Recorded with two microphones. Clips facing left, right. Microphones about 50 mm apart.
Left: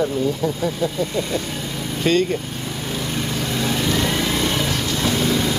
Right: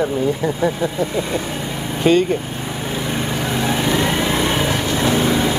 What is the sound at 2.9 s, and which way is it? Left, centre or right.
Vehicle, centre.